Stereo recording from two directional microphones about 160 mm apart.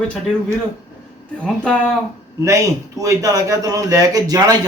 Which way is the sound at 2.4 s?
20° right (ahead or behind).